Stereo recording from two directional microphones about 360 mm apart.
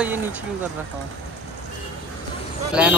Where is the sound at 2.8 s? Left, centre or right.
Centre.